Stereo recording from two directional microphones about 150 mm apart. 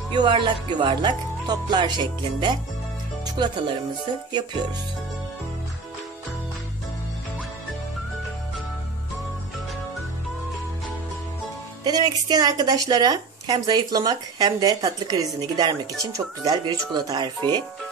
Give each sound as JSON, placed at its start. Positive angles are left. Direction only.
{"t": 0.1, "sound": "a woman's voice", "side_deg": -30}
{"t": 11.8, "sound": "a woman's voice", "side_deg": -25}